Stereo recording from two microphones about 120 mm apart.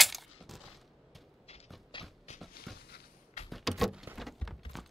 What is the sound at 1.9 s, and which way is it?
Shuffle, 40° left (ahead or behind).